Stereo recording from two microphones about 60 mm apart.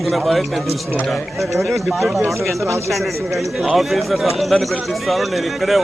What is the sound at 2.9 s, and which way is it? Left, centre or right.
Speech, centre.